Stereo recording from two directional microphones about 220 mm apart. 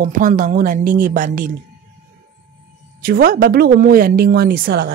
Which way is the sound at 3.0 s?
40° right (ahead or behind).